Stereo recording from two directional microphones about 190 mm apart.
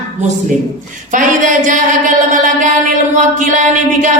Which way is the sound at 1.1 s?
45° right (ahead or behind).